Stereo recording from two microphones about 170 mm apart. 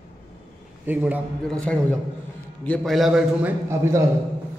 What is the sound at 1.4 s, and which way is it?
A man's voice, 5° left (ahead or behind).